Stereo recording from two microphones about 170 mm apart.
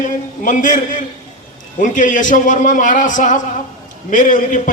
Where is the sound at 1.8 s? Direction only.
50° left (ahead or behind).